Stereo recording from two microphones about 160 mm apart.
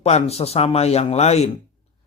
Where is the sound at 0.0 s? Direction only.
40° left (ahead or behind).